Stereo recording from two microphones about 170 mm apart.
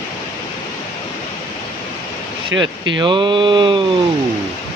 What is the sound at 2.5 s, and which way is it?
Speech, 15° right (ahead or behind).